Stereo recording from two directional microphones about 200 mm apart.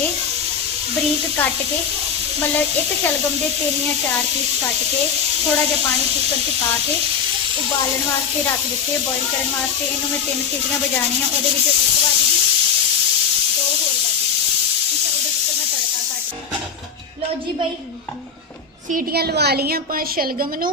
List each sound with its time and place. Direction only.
18.9 s a woman's voice: 50° right (ahead or behind)